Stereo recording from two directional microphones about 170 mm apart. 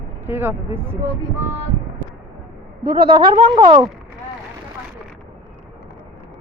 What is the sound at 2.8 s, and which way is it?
Speech, 30° right (ahead or behind).